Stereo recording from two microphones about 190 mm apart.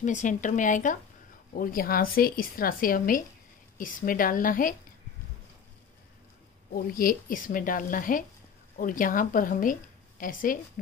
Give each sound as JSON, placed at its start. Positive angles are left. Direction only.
{"t": 0.0, "sound": "speech", "side_deg": 40}
{"t": 6.7, "sound": "a woman's voice", "side_deg": 50}